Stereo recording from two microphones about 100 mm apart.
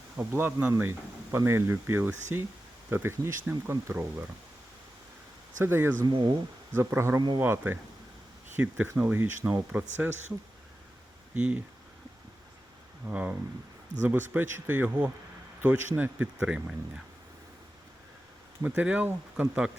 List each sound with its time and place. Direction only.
0.2 s speech: 15° right (ahead or behind)
5.6 s speech: 25° right (ahead or behind)
6.1 s speech: 50° right (ahead or behind)
6.7 s speech: 25° right (ahead or behind)
11.3 s speech: 15° right (ahead or behind)
13.1 s speech: 15° right (ahead or behind)
18.7 s speech: 15° right (ahead or behind)